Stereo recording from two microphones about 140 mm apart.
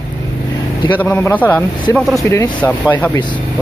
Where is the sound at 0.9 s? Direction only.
15° left (ahead or behind).